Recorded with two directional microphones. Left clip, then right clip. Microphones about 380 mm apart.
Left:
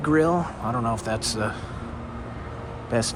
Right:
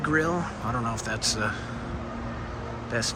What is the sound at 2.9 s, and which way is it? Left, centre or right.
Speech, centre.